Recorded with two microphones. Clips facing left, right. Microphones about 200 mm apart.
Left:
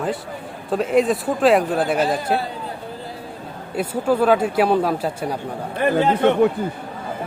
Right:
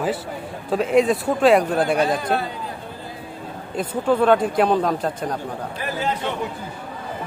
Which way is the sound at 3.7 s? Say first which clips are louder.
Left 1 dB; 10° left (ahead or behind).